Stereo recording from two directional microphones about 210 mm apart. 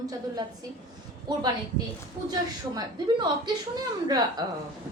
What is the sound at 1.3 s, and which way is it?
A woman's voice, 20° right (ahead or behind).